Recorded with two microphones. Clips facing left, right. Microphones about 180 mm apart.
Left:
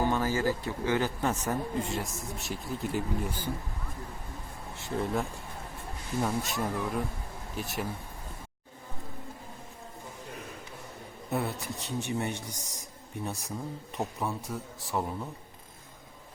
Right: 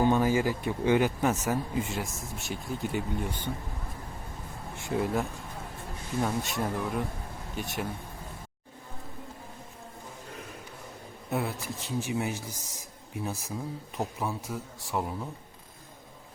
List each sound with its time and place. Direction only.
0.0 s a man's voice: 15° right (ahead or behind); by 3.4 s centre (ahead or behind)
6.2 s a man's voice: centre (ahead or behind)
11.3 s a man's voice: centre (ahead or behind)